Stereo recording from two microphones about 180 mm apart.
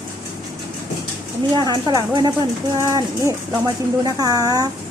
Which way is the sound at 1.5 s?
25° right (ahead or behind).